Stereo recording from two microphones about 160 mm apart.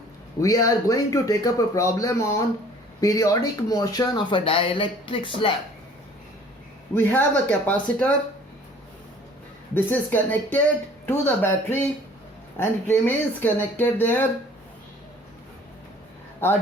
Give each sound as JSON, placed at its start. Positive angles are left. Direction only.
{"t": 0.4, "sound": "speech", "side_deg": 20}
{"t": 6.9, "sound": "speech", "side_deg": 10}
{"t": 9.7, "sound": "speech", "side_deg": 10}